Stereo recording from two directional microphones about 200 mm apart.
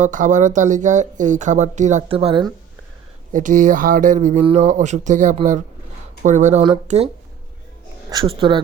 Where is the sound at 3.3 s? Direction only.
40° right (ahead or behind).